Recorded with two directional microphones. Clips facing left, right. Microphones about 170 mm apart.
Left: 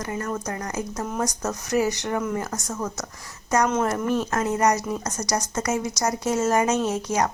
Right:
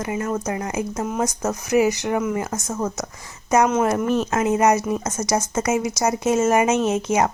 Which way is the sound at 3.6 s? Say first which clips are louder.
Right 4 dB; 10° right (ahead or behind).